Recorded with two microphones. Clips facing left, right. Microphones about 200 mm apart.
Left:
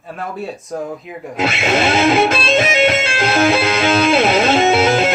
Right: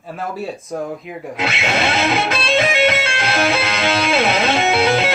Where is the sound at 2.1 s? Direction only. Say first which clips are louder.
Left 5 dB; 50° left (ahead or behind).